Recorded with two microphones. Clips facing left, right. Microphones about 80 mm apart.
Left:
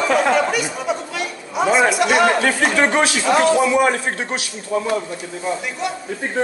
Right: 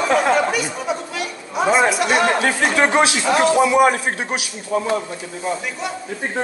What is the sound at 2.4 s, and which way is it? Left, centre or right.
A man's voice, centre.